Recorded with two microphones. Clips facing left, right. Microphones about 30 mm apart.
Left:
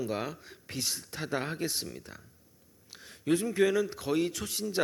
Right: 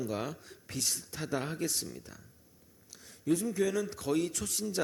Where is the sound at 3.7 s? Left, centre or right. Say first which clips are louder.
Left 3 dB; centre.